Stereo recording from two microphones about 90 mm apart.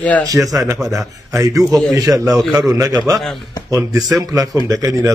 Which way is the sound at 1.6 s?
Centre (ahead or behind).